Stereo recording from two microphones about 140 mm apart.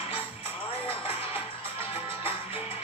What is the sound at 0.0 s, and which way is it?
Music, 40° left (ahead or behind).